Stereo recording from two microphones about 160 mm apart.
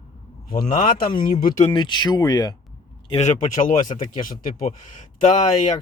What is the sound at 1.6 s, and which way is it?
Speech, 30° left (ahead or behind).